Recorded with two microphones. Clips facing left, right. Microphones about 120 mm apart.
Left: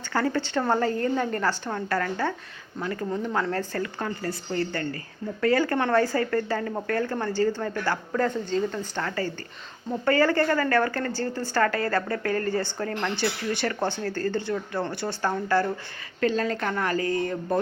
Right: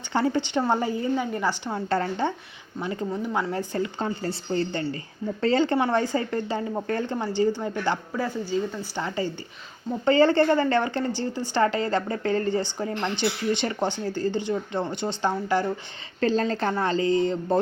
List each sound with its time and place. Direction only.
0.3 s a woman's voice: 15° right (ahead or behind)
3.1 s a woman's voice: 10° right (ahead or behind)
16.2 s a woman's voice: 30° right (ahead or behind)